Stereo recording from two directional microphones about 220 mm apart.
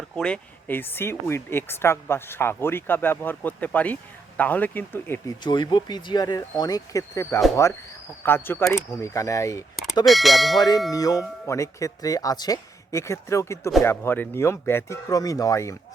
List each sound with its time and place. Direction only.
0.2 s speech: 5° left (ahead or behind)
5.4 s speech: 20° left (ahead or behind)
10.1 s bell: centre (ahead or behind)
10.9 s speech: 15° left (ahead or behind)